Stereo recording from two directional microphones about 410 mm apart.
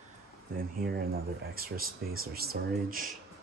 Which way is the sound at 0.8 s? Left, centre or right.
Right.